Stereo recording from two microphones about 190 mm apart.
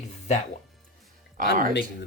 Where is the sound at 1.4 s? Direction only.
45° right (ahead or behind).